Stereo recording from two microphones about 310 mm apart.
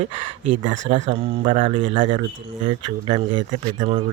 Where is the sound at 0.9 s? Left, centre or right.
Right.